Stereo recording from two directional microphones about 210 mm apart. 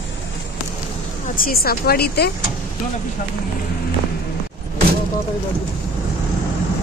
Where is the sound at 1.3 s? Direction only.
45° left (ahead or behind).